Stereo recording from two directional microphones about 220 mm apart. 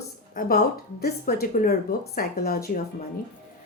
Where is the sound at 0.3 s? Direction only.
40° left (ahead or behind).